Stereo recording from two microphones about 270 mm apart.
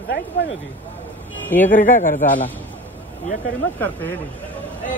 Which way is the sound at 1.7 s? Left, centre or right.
Left.